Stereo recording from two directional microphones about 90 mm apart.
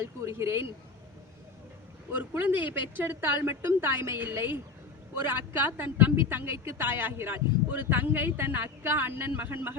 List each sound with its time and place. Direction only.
0.0 s speech: 30° right (ahead or behind)
2.4 s speech: 20° right (ahead or behind)